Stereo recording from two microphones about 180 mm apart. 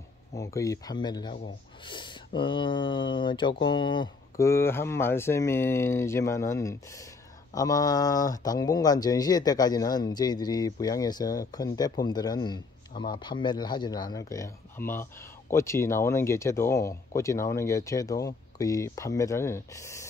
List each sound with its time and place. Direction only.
0.3 s a man's voice: 15° left (ahead or behind)